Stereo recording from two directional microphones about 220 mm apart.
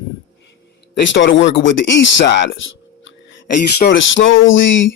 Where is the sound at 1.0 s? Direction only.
55° left (ahead or behind).